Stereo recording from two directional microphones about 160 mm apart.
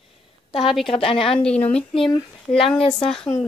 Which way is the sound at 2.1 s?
30° left (ahead or behind).